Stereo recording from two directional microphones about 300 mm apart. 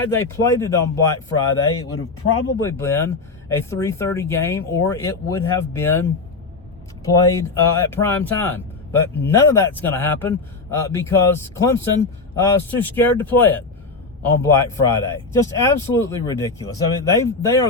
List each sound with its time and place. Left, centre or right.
0.0 s speech: centre